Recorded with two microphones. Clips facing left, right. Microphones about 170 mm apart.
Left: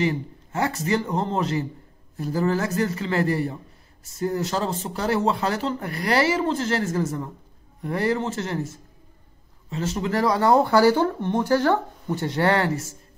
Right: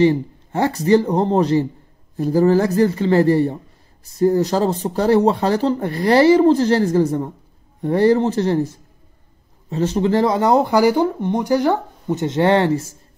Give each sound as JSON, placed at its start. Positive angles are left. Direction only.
{"t": 0.0, "sound": "speech", "side_deg": -30}